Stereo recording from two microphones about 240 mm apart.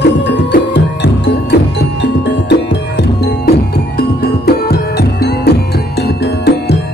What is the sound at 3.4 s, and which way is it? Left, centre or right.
Music, left.